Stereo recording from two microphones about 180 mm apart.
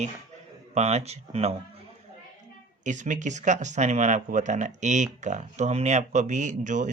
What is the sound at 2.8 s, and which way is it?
Speech, 45° right (ahead or behind).